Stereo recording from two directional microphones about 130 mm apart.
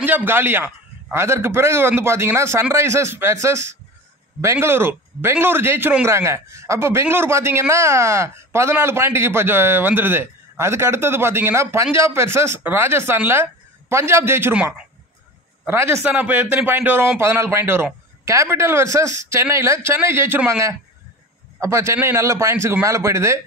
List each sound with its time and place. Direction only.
0.0 s a man's voice: 15° right (ahead or behind)
15.6 s a man's voice: 20° right (ahead or behind)